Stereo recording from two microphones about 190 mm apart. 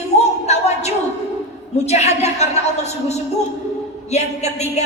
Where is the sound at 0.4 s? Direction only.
35° left (ahead or behind).